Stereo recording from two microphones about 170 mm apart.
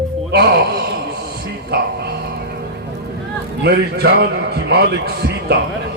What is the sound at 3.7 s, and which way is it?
A man's voice, 75° right (ahead or behind).